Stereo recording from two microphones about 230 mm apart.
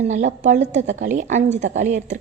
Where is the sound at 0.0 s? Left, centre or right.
Right.